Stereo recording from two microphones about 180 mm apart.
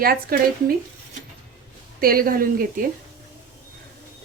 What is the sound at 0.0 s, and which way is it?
Speech, 55° right (ahead or behind).